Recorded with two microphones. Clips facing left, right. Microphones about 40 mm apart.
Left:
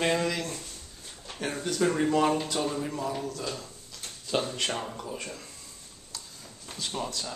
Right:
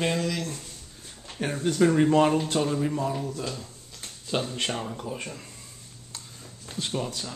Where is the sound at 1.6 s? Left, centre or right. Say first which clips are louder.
Right 7 dB; right.